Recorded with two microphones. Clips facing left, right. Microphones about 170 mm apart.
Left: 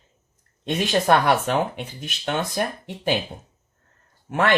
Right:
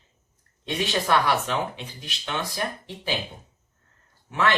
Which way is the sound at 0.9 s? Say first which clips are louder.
Left 5 dB; 50° left (ahead or behind).